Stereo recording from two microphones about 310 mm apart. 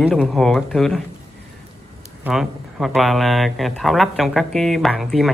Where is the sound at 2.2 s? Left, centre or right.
Centre.